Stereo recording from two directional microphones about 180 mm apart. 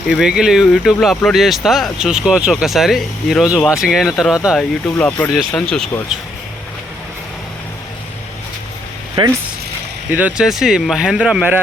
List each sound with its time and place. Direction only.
0.1 s speech: 5° right (ahead or behind)
9.2 s speech: 30° right (ahead or behind)
10.1 s speech: 10° right (ahead or behind)